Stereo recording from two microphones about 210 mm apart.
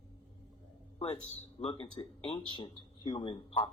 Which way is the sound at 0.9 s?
25° left (ahead or behind).